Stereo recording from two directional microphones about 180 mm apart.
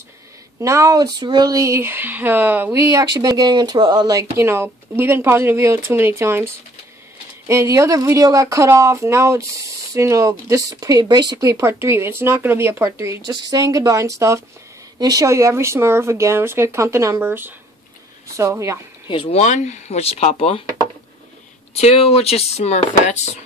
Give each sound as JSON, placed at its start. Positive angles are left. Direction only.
{"t": 0.6, "sound": "speech", "side_deg": -15}
{"t": 19.2, "sound": "speech", "side_deg": 40}
{"t": 21.7, "sound": "speech", "side_deg": 35}